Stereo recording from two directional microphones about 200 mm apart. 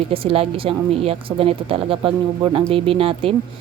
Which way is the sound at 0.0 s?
30° right (ahead or behind).